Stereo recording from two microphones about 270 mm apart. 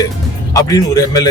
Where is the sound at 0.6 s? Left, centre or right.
Centre.